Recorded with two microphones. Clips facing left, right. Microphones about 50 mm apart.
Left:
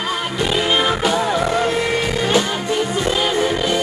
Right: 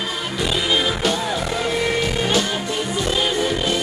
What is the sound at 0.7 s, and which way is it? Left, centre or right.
Music, left.